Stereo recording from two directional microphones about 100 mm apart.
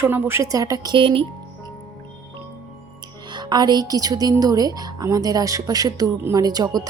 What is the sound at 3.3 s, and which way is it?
Speech, 45° right (ahead or behind).